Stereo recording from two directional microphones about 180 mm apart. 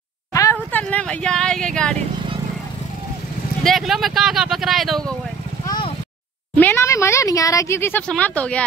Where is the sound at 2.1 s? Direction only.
25° right (ahead or behind).